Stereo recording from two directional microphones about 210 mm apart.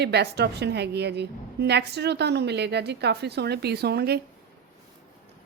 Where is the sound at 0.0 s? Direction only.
50° right (ahead or behind).